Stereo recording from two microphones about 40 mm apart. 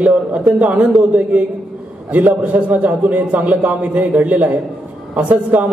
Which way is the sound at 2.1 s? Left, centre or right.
Right.